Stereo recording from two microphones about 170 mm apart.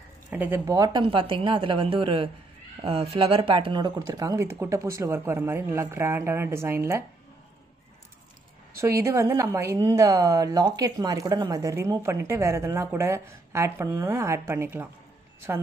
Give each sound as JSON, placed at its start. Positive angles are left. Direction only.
{"t": 0.3, "sound": "a woman's voice", "side_deg": -10}
{"t": 8.7, "sound": "a woman's voice", "side_deg": -15}